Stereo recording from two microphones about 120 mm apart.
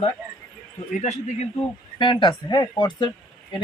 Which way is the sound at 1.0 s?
65° left (ahead or behind).